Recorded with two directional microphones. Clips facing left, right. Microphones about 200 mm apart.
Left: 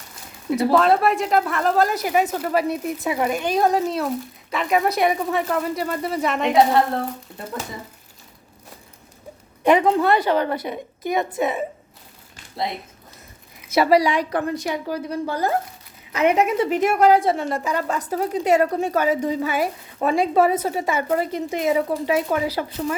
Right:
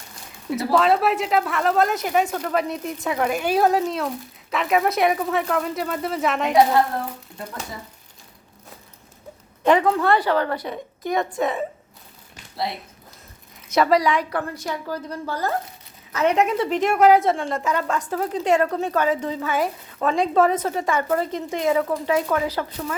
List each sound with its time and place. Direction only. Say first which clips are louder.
0.5 s speech: left 2 dB; centre (ahead or behind)
9.6 s a woman's voice: left 1 dB; 20° left (ahead or behind)
13.7 s a woman's voice: left 2 dB; 10° left (ahead or behind)